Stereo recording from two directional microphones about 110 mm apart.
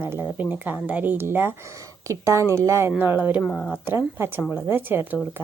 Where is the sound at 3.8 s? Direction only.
20° right (ahead or behind).